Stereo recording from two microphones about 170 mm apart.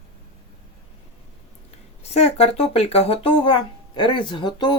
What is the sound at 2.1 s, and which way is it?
Speech, 40° left (ahead or behind).